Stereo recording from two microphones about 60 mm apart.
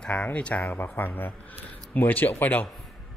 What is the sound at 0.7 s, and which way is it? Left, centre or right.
A man's voice, left.